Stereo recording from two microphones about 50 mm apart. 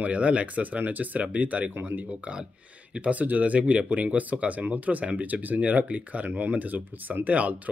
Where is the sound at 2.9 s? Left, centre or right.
Right.